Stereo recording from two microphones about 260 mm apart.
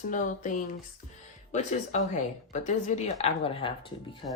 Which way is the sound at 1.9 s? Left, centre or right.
Left.